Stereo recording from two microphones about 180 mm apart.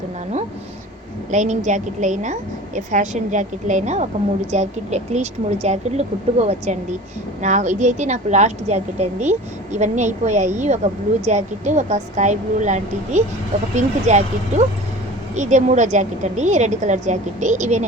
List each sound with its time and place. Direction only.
1.3 s a woman's voice: 40° right (ahead or behind)
15.4 s a woman's voice: 40° right (ahead or behind)